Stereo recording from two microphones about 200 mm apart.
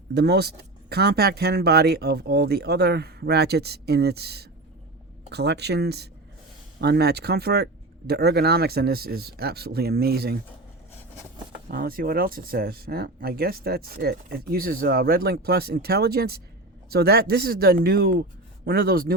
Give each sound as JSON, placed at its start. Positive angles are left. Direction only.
{"t": 0.1, "sound": "speech", "side_deg": -55}
{"t": 11.7, "sound": "speech", "side_deg": -45}